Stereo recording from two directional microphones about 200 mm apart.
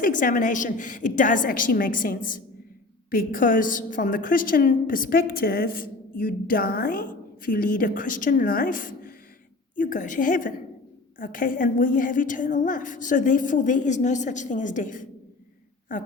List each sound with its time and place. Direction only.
0.0 s a woman's voice: 40° left (ahead or behind)